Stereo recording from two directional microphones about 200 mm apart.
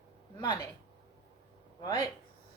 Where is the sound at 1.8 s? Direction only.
15° left (ahead or behind).